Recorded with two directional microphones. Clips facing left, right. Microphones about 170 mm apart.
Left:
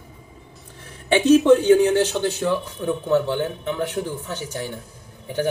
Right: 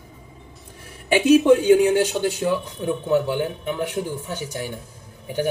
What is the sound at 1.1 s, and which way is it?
A man's voice, 10° right (ahead or behind).